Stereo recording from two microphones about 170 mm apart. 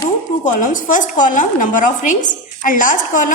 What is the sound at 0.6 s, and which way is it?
A woman's voice, 50° left (ahead or behind).